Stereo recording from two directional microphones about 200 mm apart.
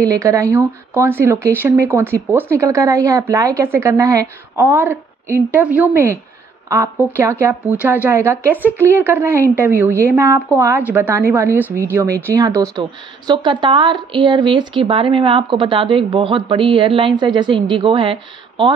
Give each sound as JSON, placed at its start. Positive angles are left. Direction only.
{"t": 0.0, "sound": "a woman's voice", "side_deg": -15}